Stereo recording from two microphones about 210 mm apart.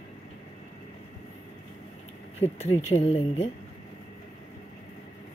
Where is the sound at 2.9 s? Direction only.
30° left (ahead or behind).